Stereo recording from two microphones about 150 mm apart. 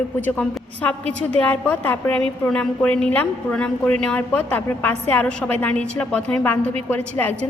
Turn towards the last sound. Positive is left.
turn(degrees=10)  # may be behind; listen again after turning